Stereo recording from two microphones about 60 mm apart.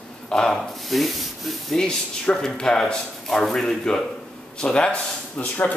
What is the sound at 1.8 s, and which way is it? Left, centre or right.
Speech, centre.